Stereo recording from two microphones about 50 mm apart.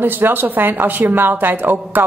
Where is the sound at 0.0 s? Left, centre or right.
Right.